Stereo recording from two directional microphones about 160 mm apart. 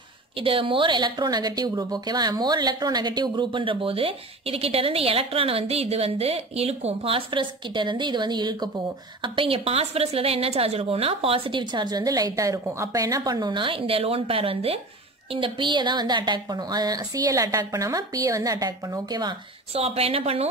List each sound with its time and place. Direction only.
0.4 s a woman's voice: 35° right (ahead or behind)
19.7 s a woman's voice: 40° right (ahead or behind)